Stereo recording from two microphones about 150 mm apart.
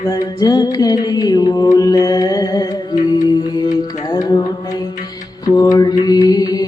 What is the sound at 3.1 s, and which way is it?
Music, 25° left (ahead or behind).